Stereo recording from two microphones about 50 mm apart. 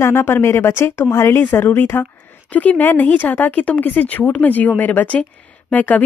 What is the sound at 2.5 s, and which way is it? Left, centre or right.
Speech, left.